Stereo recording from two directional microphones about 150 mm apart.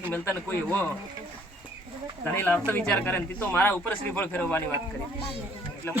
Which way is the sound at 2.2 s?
15° left (ahead or behind).